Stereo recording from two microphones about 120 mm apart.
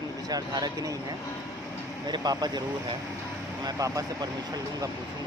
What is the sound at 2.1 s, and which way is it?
Speech, 35° right (ahead or behind).